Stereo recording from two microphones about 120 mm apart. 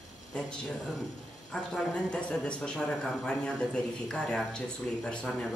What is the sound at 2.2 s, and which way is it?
A man's voice, 10° left (ahead or behind).